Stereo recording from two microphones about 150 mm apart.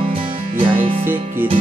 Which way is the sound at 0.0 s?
35° right (ahead or behind).